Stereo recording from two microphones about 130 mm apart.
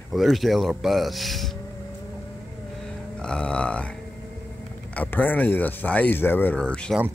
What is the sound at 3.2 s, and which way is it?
Burping, 5° left (ahead or behind).